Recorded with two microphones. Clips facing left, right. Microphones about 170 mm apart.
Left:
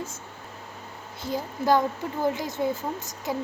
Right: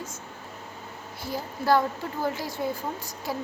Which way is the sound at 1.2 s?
20° left (ahead or behind).